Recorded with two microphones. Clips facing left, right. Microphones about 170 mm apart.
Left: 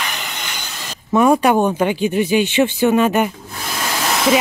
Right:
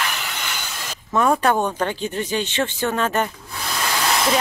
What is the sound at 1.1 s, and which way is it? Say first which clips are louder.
Speech: left 5 dB; 15° left (ahead or behind).